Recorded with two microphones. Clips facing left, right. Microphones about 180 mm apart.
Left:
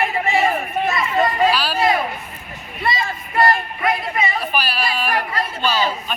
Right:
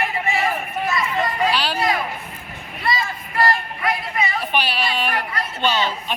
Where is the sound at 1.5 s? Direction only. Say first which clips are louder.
Left 2 dB; 20° right (ahead or behind).